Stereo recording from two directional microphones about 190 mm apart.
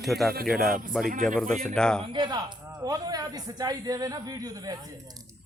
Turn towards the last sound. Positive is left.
turn(degrees=-20)  # may be behind; listen again after turning